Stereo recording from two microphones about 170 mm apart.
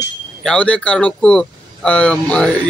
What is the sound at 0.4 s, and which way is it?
A man's voice, 5° left (ahead or behind).